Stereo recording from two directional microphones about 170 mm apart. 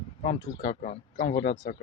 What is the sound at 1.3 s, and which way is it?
Speech, 60° left (ahead or behind).